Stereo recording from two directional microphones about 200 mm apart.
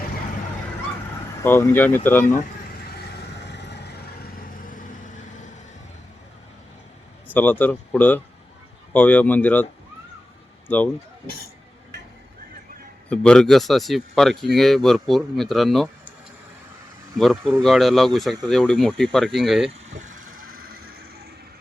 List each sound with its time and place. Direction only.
1.4 s speech: 10° left (ahead or behind)
3.4 s vehicle: 60° left (ahead or behind)
4.7 s vehicle: 40° left (ahead or behind)
7.3 s speech: 10° left (ahead or behind)
10.7 s speech: 10° left (ahead or behind)
13.1 s speech: 5° left (ahead or behind)
17.2 s speech: centre (ahead or behind)
20.0 s vehicle: 45° right (ahead or behind)